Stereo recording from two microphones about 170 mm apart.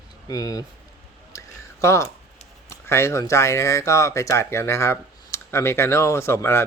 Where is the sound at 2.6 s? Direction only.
15° left (ahead or behind).